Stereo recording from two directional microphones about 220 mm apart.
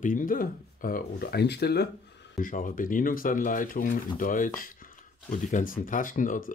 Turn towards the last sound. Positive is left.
turn(degrees=35)  # may be behind; listen again after turning